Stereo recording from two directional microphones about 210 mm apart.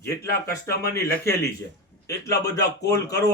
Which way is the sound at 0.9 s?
15° left (ahead or behind).